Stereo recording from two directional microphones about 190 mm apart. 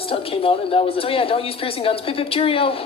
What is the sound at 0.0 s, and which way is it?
Speech, 30° left (ahead or behind).